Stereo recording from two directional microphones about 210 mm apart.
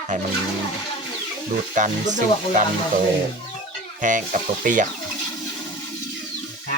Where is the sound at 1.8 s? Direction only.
35° right (ahead or behind).